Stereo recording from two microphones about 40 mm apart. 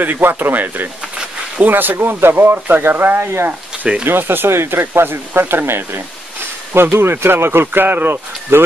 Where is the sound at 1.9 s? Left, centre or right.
Right.